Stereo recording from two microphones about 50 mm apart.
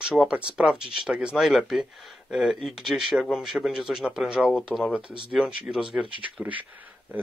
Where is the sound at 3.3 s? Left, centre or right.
Centre.